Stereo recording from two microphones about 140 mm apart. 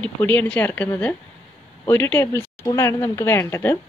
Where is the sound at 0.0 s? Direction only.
10° left (ahead or behind).